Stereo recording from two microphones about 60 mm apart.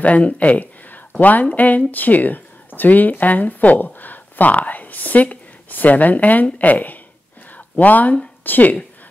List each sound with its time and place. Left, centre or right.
0.0 s speech: left